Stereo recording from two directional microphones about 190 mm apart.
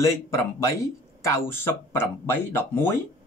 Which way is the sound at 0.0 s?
15° left (ahead or behind).